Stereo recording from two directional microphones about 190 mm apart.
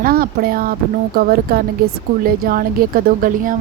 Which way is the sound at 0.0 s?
50° right (ahead or behind).